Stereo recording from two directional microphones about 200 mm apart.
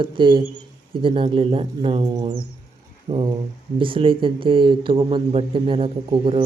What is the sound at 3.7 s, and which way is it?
Speech, 25° right (ahead or behind).